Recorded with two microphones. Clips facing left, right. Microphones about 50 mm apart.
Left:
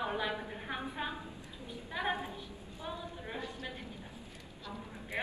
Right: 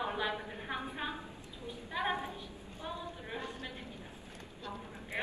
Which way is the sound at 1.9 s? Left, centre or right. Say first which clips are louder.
Right 1 dB; right.